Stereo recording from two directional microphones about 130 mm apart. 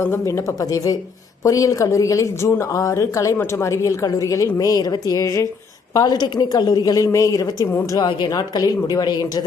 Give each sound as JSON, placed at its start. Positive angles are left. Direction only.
{"t": 0.0, "sound": "speech", "side_deg": 20}